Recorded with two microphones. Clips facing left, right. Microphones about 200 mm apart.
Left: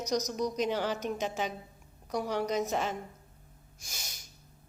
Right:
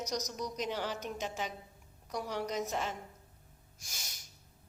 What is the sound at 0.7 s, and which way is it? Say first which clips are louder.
A woman's voice: left 6 dB; 80° left.